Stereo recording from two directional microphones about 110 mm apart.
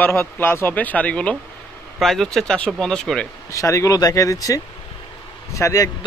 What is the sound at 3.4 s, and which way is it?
A man's voice, 30° left (ahead or behind).